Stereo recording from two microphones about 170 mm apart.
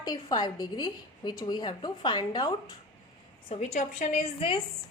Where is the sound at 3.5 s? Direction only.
40° left (ahead or behind).